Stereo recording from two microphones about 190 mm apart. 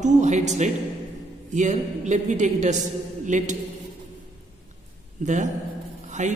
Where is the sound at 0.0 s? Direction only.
40° right (ahead or behind).